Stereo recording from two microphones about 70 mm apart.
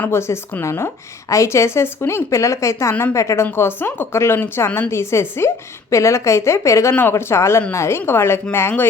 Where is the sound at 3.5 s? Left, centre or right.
Left.